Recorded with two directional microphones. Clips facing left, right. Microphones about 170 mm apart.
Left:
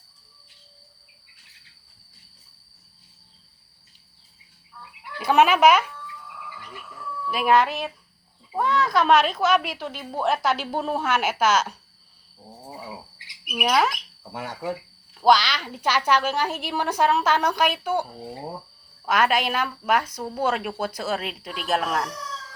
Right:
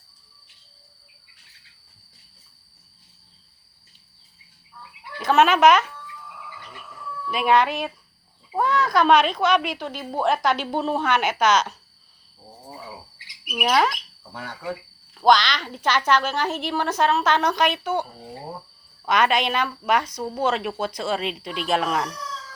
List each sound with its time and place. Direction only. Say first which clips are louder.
5.2 s speech: right 1 dB; 10° left (ahead or behind)
7.3 s speech: even; centre (ahead or behind)
13.5 s speech: right 1 dB; 5° left (ahead or behind)
14.3 s speech: left 2 dB; 20° left (ahead or behind)
19.0 s speech: right 1 dB; 5° left (ahead or behind)